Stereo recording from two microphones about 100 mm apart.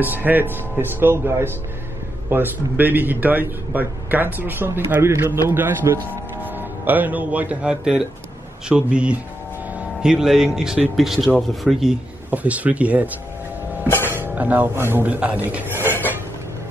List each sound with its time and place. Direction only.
0.0 s a man's voice: 20° right (ahead or behind); by 12.0 s 5° right (ahead or behind)
12.3 s speech: 15° right (ahead or behind)
13.8 s speech: 25° left (ahead or behind)
14.1 s speech: 20° right (ahead or behind)